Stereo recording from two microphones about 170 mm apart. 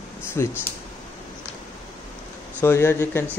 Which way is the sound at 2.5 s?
15° left (ahead or behind).